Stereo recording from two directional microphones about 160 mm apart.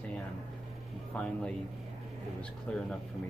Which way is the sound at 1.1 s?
5° left (ahead or behind).